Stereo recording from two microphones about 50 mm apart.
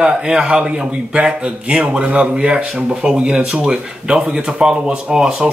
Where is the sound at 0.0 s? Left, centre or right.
Centre.